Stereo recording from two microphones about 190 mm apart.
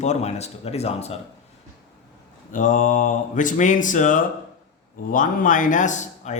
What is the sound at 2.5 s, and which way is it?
A man's voice, 40° left (ahead or behind).